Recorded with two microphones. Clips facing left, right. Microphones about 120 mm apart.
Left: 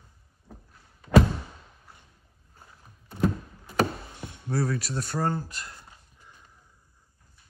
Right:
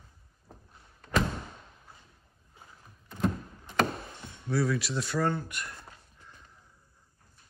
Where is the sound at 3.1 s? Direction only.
5° left (ahead or behind).